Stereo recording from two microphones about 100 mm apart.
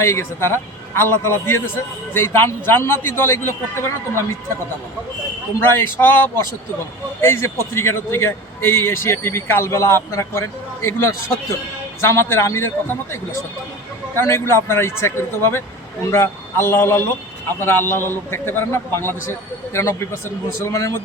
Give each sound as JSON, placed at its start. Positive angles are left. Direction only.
{"t": 0.0, "sound": "a man's voice", "side_deg": 25}
{"t": 5.6, "sound": "a man's voice", "side_deg": 20}
{"t": 14.2, "sound": "a man's voice", "side_deg": 25}